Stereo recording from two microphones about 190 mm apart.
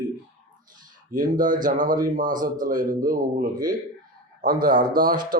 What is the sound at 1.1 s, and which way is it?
Speech, 45° right (ahead or behind).